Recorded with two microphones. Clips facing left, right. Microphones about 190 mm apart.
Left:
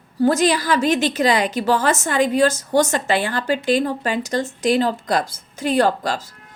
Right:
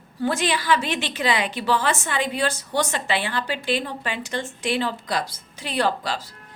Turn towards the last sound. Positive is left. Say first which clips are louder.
# left 5 dB
turn(degrees=45)  # may be behind; listen again after turning